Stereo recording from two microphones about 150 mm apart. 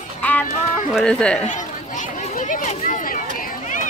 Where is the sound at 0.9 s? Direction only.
5° left (ahead or behind).